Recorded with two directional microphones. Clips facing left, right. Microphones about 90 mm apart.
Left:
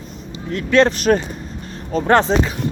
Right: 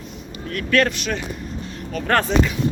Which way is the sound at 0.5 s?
25° left (ahead or behind).